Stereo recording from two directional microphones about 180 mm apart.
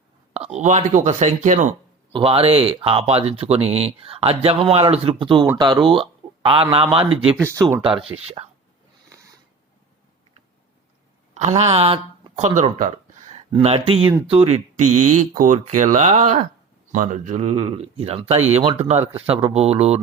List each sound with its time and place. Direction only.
0.3 s speech: 35° right (ahead or behind)
2.1 s speech: 30° right (ahead or behind)
7.4 s speech: 15° right (ahead or behind)
11.3 s speech: 35° right (ahead or behind)